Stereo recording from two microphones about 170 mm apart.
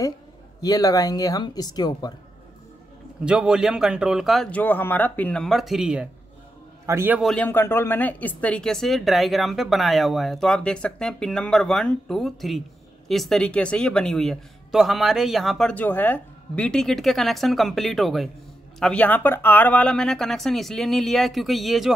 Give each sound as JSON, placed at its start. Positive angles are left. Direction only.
{"t": 0.6, "sound": "speech", "side_deg": 20}
{"t": 3.3, "sound": "a man's voice", "side_deg": -5}
{"t": 7.2, "sound": "speech", "side_deg": 5}